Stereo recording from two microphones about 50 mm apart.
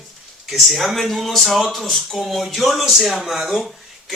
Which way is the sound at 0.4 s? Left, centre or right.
Centre.